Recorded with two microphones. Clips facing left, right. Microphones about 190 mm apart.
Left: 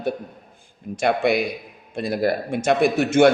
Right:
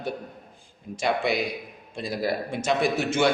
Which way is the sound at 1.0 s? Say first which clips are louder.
Left 5 dB; 55° left (ahead or behind).